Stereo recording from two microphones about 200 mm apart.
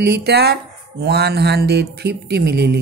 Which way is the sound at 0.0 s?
55° right (ahead or behind).